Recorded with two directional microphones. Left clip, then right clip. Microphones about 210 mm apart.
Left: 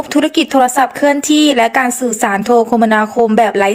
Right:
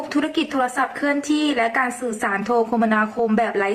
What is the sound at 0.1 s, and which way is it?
A woman's voice, 35° left (ahead or behind).